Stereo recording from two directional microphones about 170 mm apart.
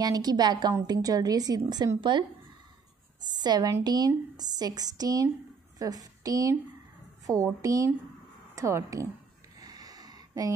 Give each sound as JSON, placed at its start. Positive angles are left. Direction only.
{"t": 0.0, "sound": "a woman's voice", "side_deg": -25}
{"t": 3.3, "sound": "a woman's voice", "side_deg": -25}
{"t": 9.6, "sound": "a sound", "side_deg": -20}